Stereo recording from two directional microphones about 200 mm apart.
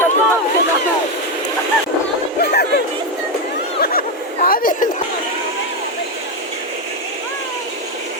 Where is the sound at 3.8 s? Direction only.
50° left (ahead or behind).